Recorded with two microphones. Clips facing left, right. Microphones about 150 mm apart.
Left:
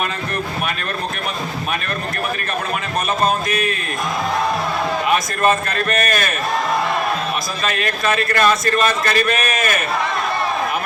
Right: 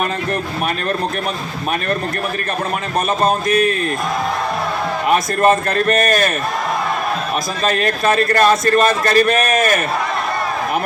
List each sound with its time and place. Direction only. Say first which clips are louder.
3.2 s a man's voice: right 4 dB; 35° right (ahead or behind)
5.0 s a man's voice: right 5 dB; 35° right (ahead or behind)
7.6 s a man's voice: right 5 dB; 35° right (ahead or behind)